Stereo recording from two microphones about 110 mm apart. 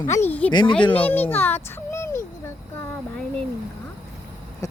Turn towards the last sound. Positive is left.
turn(degrees=30)  # may be behind; listen again after turning